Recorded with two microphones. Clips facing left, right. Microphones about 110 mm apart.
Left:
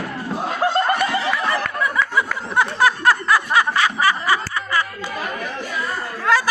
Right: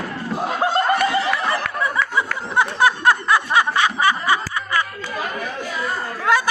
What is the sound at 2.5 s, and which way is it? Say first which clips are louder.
Snicker: even; 20° right (ahead or behind).